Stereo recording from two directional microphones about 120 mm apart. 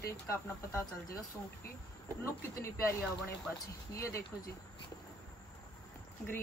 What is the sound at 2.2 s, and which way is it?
Speech, 20° left (ahead or behind).